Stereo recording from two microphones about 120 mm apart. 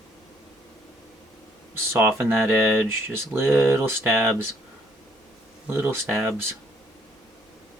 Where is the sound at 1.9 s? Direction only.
15° right (ahead or behind).